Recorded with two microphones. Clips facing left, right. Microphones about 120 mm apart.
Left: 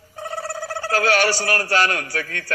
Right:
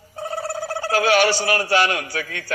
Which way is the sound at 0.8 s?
15° right (ahead or behind).